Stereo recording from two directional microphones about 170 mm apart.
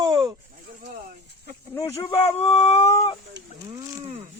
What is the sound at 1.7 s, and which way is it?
Speech, 20° left (ahead or behind).